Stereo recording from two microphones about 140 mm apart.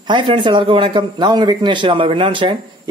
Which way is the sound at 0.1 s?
35° right (ahead or behind).